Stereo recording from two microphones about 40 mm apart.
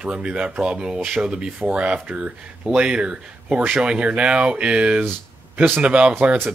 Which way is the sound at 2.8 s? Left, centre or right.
Right.